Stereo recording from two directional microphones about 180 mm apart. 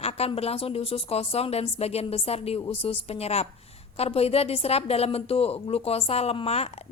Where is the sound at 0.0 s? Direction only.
35° left (ahead or behind).